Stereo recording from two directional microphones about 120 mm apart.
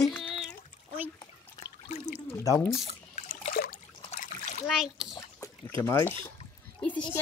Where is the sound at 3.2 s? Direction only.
80° left.